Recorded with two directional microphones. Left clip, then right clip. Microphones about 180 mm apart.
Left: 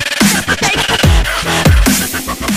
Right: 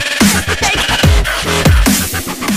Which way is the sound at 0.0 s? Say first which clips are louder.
Even; centre (ahead or behind).